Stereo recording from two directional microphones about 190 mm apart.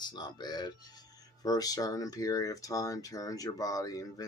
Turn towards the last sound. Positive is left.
turn(degrees=20)  # may be behind; listen again after turning